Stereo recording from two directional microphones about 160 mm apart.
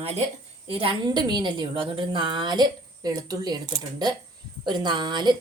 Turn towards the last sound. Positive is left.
turn(degrees=-25)  # may be behind; listen again after turning